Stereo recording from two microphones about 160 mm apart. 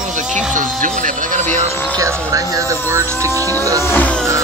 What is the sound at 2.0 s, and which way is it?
Vehicle, 20° right (ahead or behind).